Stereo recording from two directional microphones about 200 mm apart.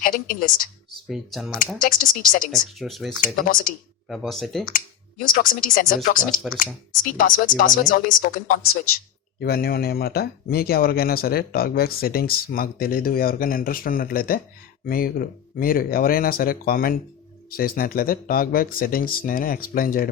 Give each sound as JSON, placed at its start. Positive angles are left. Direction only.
{"t": 0.0, "sound": "speech", "side_deg": 45}
{"t": 1.0, "sound": "speech", "side_deg": 0}
{"t": 1.8, "sound": "speech", "side_deg": 45}
{"t": 2.5, "sound": "speech", "side_deg": 0}
{"t": 3.3, "sound": "speech", "side_deg": 45}
{"t": 4.1, "sound": "speech", "side_deg": 0}
{"t": 4.6, "sound": "speech", "side_deg": 45}